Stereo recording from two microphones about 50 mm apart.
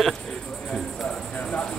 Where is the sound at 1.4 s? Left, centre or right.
Left.